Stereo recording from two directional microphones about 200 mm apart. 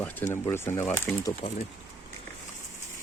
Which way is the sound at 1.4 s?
25° left (ahead or behind).